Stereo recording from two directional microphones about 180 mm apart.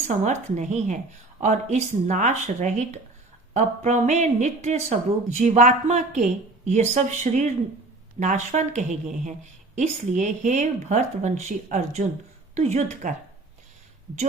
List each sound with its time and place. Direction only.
0.1 s speech: 45° right (ahead or behind)